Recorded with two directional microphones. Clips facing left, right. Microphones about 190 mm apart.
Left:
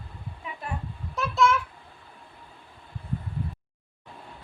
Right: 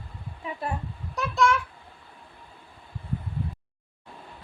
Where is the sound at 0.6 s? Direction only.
35° right (ahead or behind).